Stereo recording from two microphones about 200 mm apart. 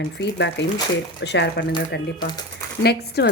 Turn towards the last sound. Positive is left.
turn(degrees=55)  # may be behind; listen again after turning